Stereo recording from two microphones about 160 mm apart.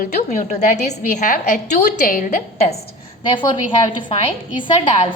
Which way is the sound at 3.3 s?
30° left (ahead or behind).